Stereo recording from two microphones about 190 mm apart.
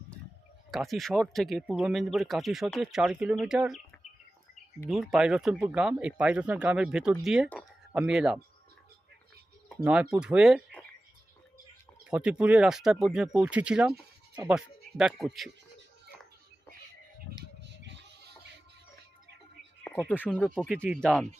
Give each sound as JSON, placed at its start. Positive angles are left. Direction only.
{"t": 0.7, "sound": "speech", "side_deg": 0}
{"t": 4.9, "sound": "speech", "side_deg": 0}
{"t": 9.6, "sound": "speech", "side_deg": -5}
{"t": 12.1, "sound": "speech", "side_deg": -5}
{"t": 17.6, "sound": "a sound", "side_deg": -70}
{"t": 20.1, "sound": "speech", "side_deg": 10}